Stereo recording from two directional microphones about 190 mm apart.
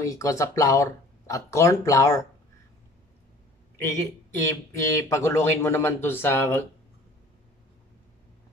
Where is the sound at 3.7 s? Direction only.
15° left (ahead or behind).